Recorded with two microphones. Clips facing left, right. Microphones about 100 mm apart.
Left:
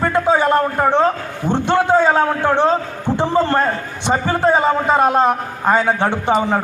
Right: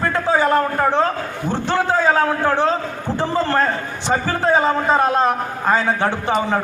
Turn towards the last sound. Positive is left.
turn(degrees=20)  # may be behind; listen again after turning